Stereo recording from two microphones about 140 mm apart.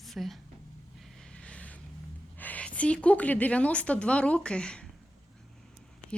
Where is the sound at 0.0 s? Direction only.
Centre (ahead or behind).